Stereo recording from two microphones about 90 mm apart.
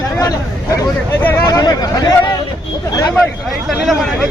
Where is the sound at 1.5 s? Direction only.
45° left (ahead or behind).